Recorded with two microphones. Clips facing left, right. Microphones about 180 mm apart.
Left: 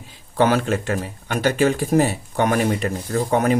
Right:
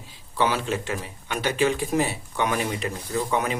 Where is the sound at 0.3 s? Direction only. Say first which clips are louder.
Left 6 dB; 50° left (ahead or behind).